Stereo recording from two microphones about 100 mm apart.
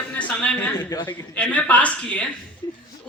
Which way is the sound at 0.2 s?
15° left (ahead or behind).